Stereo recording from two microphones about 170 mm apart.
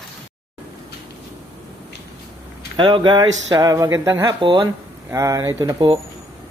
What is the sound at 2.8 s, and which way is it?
Speech, 25° right (ahead or behind).